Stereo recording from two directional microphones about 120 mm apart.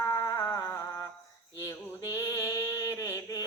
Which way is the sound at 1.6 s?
25° left (ahead or behind).